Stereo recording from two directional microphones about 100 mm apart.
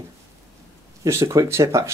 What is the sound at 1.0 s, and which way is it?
Speech, 30° right (ahead or behind).